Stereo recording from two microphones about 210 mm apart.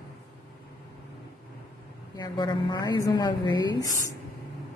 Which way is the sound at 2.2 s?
20° left (ahead or behind).